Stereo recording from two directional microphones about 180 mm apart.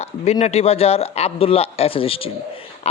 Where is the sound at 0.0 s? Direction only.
35° left (ahead or behind).